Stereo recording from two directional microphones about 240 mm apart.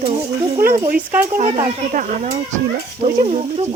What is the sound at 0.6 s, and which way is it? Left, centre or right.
A child's voice, right.